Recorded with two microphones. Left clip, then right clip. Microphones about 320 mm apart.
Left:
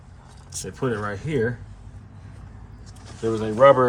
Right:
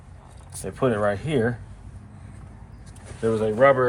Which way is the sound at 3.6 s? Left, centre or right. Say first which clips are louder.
Left 4 dB; centre.